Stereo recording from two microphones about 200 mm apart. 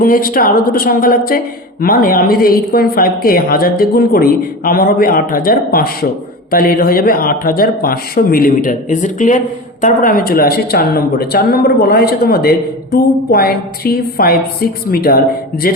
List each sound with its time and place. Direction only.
0.0 s speech: 45° left (ahead or behind)